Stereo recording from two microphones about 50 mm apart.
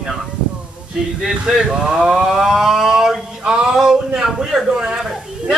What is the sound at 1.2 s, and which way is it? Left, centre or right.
A woman's voice, centre.